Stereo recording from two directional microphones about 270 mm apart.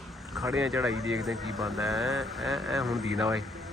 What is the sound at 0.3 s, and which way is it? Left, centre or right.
Speech, centre.